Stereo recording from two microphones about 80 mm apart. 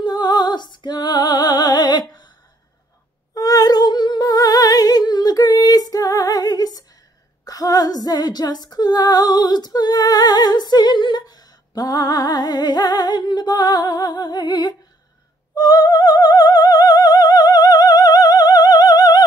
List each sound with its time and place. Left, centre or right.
0.0 s music: left
3.3 s humming: left
7.4 s female singing: left
15.5 s opera: left